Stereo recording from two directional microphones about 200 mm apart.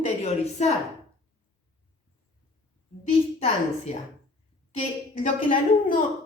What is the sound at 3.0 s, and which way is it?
A woman's voice, 30° left (ahead or behind).